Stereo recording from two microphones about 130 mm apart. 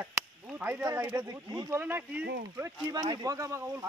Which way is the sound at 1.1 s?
25° right (ahead or behind).